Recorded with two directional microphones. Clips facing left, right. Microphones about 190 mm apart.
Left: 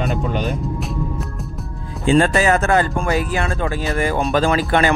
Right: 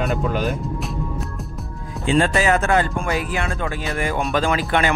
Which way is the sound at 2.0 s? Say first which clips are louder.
Left 3 dB; 40° left (ahead or behind).